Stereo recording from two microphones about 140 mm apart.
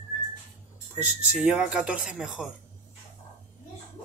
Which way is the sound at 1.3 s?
5° right (ahead or behind).